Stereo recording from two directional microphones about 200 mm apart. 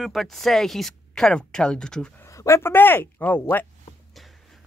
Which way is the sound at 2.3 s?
15° left (ahead or behind).